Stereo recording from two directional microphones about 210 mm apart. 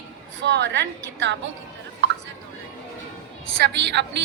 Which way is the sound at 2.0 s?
60° right (ahead or behind).